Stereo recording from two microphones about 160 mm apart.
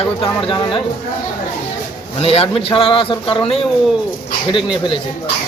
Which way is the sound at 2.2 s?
35° left (ahead or behind).